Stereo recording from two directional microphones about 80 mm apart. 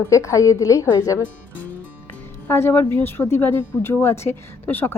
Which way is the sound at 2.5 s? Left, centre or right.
Left.